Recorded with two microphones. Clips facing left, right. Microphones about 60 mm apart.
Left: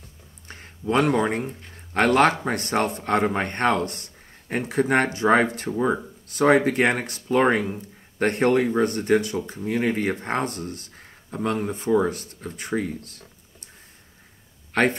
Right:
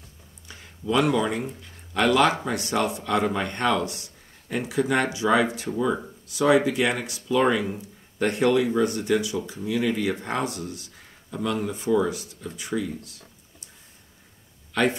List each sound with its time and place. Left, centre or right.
0.5 s a man's voice: left
14.7 s a man's voice: left